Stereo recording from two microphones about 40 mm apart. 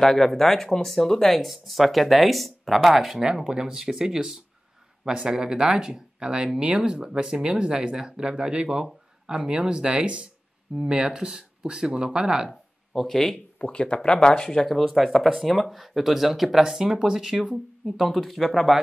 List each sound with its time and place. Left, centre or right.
0.0 s speech: centre
1.4 s speech: centre
3.2 s speech: centre
5.0 s speech: right
12.4 s speech: centre
13.6 s speech: left
14.7 s speech: centre
17.8 s speech: centre